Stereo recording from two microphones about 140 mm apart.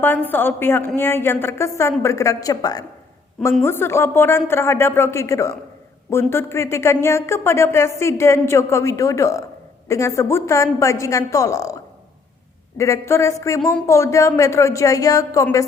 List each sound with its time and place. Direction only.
0.0 s a woman's voice: 15° left (ahead or behind)